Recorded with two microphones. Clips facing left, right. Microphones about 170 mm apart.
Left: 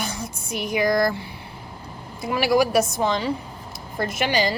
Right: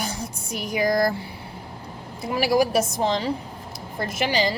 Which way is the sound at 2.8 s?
30° right (ahead or behind).